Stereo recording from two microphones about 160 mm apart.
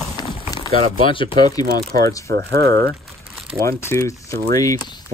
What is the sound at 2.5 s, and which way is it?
Speech, 20° left (ahead or behind).